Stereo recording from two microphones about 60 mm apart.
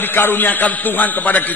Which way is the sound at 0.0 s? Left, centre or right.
Left.